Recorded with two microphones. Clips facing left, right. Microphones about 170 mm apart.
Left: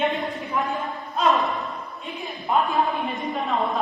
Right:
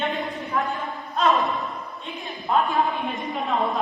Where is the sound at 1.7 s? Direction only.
Centre (ahead or behind).